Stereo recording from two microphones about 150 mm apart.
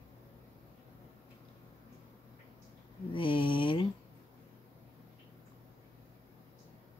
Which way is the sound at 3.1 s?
35° left (ahead or behind).